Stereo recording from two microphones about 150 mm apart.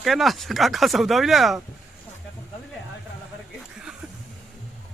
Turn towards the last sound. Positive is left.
turn(degrees=-5)  # may be behind; listen again after turning